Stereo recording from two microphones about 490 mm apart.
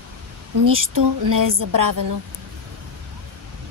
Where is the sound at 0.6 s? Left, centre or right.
Right.